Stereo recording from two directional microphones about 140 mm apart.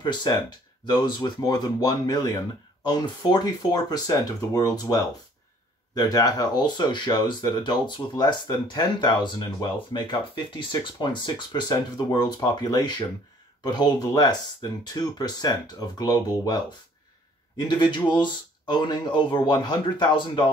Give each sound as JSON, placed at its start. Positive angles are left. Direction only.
{"t": 0.0, "sound": "speech", "side_deg": 30}